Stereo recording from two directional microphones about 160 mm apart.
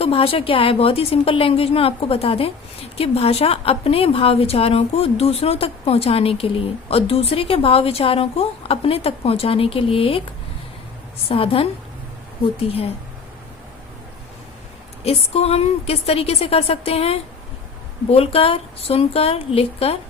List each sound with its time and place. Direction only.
0.0 s a woman's voice: 35° left (ahead or behind)
11.3 s a woman's voice: 35° left (ahead or behind)
15.0 s a woman's voice: 40° left (ahead or behind)